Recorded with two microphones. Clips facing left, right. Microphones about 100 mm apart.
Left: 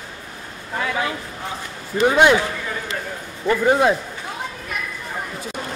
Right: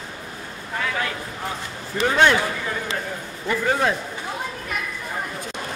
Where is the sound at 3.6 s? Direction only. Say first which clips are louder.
Left 5 dB; 15° left (ahead or behind).